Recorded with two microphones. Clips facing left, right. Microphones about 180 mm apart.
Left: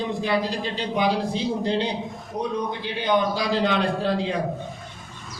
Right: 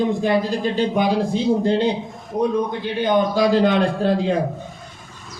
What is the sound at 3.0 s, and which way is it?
Speech, 50° right (ahead or behind).